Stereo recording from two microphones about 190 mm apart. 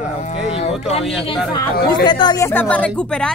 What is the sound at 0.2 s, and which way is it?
Speech, 35° left (ahead or behind).